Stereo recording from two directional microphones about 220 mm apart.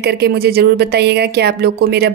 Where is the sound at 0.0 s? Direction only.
45° right (ahead or behind).